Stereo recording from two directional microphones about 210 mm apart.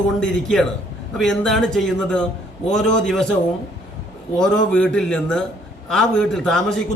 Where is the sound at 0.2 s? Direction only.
Centre (ahead or behind).